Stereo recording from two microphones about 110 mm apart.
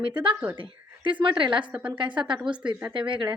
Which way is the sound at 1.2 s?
45° right (ahead or behind).